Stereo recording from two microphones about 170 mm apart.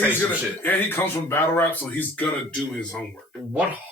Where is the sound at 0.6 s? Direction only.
10° left (ahead or behind).